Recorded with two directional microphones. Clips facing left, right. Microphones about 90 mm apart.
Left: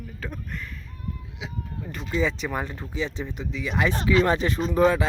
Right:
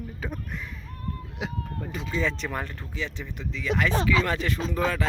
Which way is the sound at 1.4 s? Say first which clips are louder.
Right 5 dB; 50° right (ahead or behind).